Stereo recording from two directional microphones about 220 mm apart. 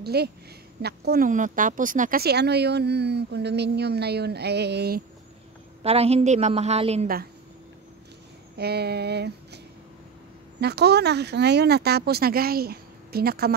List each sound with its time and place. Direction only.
0.0 s a woman's voice: 45° right (ahead or behind)
5.8 s a woman's voice: 25° right (ahead or behind)
8.5 s speech: 45° right (ahead or behind)
10.6 s speech: 50° right (ahead or behind)